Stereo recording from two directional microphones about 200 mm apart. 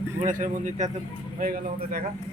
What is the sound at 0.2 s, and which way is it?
A woman's voice, 40° right (ahead or behind).